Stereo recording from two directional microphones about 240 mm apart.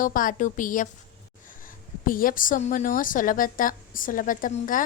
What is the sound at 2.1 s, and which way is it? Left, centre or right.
A woman's voice, left.